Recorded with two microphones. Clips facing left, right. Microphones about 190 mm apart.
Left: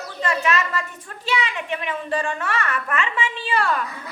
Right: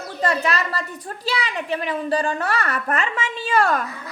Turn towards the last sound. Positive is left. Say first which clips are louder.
# right 3 dB
turn(degrees=-45)  # may be behind; listen again after turning